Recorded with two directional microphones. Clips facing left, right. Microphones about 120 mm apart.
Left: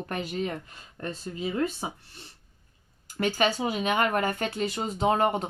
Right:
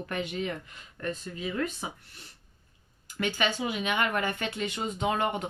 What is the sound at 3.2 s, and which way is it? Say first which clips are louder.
Speech: left 4 dB; 40° left (ahead or behind).